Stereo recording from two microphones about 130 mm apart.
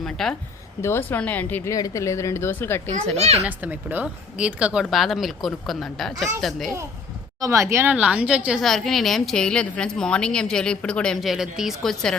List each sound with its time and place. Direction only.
0.0 s a woman's voice: 5° left (ahead or behind)
0.8 s speech: 20° left (ahead or behind)
1.7 s a woman's voice: 25° left (ahead or behind)
3.2 s a child's voice: 55° right (ahead or behind)
3.4 s a woman's voice: 15° right (ahead or behind)
7.4 s a woman's voice: 25° right (ahead or behind); by 12.1 s 5° left (ahead or behind)